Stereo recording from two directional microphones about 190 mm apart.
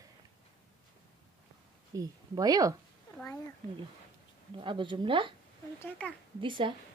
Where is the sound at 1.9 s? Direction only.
20° right (ahead or behind).